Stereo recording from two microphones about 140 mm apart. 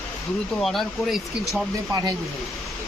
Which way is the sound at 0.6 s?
Centre (ahead or behind).